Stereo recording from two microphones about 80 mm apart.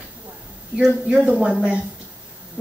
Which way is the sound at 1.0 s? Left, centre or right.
Centre.